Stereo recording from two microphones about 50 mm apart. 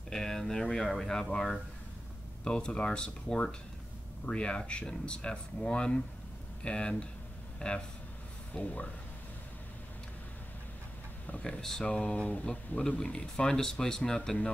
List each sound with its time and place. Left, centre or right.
0.1 s speech: centre
2.4 s speech: centre
11.6 s speech: centre